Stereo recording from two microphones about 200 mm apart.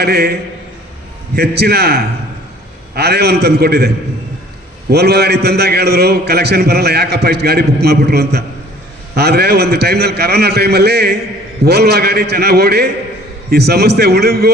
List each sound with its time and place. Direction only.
0.0 s a man's voice: 55° right (ahead or behind)
1.4 s a man's voice: 55° right (ahead or behind)